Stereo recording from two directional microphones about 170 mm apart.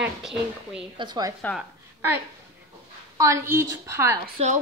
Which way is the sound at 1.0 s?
25° right (ahead or behind).